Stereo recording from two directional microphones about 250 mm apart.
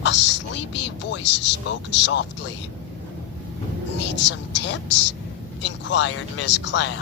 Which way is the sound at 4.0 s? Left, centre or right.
Left.